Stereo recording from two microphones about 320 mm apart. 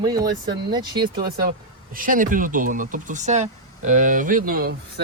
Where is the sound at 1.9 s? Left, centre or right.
Right.